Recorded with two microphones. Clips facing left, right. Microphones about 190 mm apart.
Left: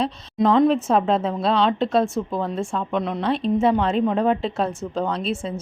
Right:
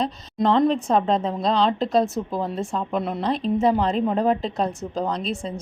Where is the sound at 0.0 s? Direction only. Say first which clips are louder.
Left 2 dB; centre (ahead or behind).